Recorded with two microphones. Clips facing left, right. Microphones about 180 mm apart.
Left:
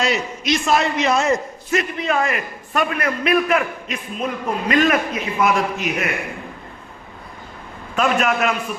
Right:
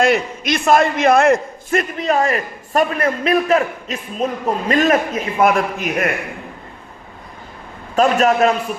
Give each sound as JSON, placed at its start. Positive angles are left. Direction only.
{"t": 0.0, "sound": "a man's voice", "side_deg": -55}
{"t": 7.9, "sound": "a man's voice", "side_deg": -35}